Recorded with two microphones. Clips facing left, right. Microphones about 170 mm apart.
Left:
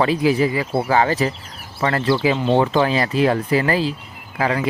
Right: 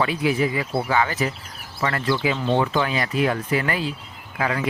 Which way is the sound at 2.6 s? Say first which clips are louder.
Left 5 dB; 35° left (ahead or behind).